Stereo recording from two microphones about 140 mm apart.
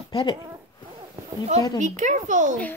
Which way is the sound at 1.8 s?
60° right (ahead or behind).